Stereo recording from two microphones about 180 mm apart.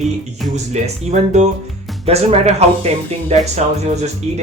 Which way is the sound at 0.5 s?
40° right (ahead or behind).